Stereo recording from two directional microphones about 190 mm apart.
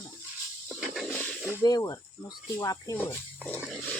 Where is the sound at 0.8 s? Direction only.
Centre (ahead or behind).